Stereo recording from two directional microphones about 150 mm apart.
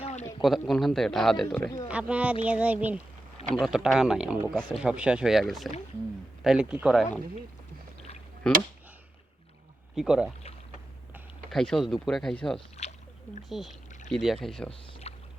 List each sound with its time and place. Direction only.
0.0 s a sound: 45° left (ahead or behind)
0.6 s speech: centre (ahead or behind)
1.9 s speech: 10° right (ahead or behind)
9.9 s speech: 5° right (ahead or behind)
11.5 s speech: 5° left (ahead or behind)
12.8 s a sound: 50° left (ahead or behind)
13.5 s speech: centre (ahead or behind)
15.1 s boat: 45° left (ahead or behind)